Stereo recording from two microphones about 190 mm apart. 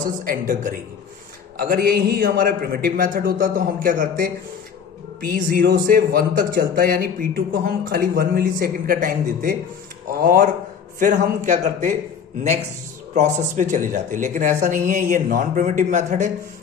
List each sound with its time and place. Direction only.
0.0 s speech: 50° right (ahead or behind)
13.1 s speech: 40° right (ahead or behind)